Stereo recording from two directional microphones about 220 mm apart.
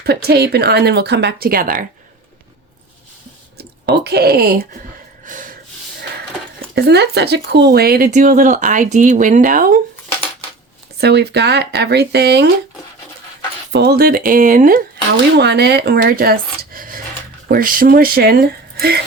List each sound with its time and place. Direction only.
0.0 s speech: 45° right (ahead or behind)
3.6 s speech: 45° right (ahead or behind)
5.2 s snort: 35° right (ahead or behind)
6.7 s speech: 50° right (ahead or behind)
10.9 s speech: 50° right (ahead or behind)
13.7 s speech: 45° right (ahead or behind)